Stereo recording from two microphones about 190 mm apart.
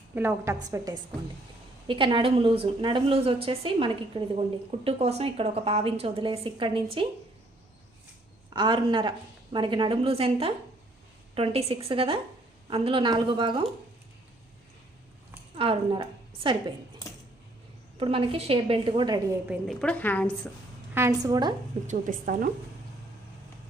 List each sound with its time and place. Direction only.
0.1 s a woman's voice: 10° right (ahead or behind)
1.9 s a woman's voice: 25° right (ahead or behind)
8.5 s a woman's voice: 25° right (ahead or behind)
15.5 s a woman's voice: 30° right (ahead or behind)
18.0 s a woman's voice: 30° right (ahead or behind)
19.5 s a woman's voice: centre (ahead or behind)
20.9 s a woman's voice: 15° right (ahead or behind)
21.8 s a woman's voice: 45° right (ahead or behind)